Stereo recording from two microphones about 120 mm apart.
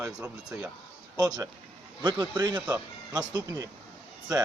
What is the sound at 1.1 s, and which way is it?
Speech, 35° right (ahead or behind).